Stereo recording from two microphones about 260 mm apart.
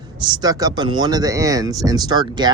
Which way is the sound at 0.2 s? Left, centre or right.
Centre.